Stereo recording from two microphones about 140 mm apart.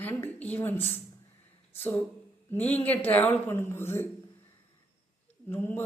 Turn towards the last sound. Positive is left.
turn(degrees=15)  # may be behind; listen again after turning